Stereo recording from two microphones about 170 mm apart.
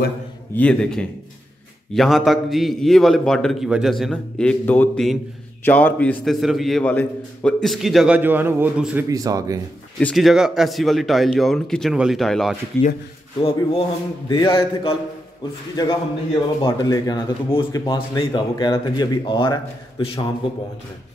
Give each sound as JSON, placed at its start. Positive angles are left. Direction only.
{"t": 0.6, "sound": "a man's voice", "side_deg": 5}
{"t": 9.1, "sound": "speech", "side_deg": -20}
{"t": 9.9, "sound": "a man's voice", "side_deg": 0}
{"t": 13.4, "sound": "speech", "side_deg": 35}
{"t": 15.7, "sound": "speech", "side_deg": 25}